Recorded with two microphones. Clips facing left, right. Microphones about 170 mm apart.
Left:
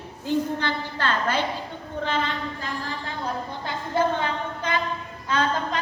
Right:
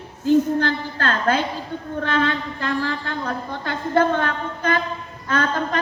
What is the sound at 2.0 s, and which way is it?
A man's voice, 65° right (ahead or behind).